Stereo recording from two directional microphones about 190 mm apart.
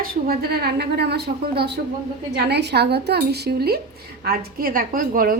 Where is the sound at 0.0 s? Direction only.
50° right (ahead or behind).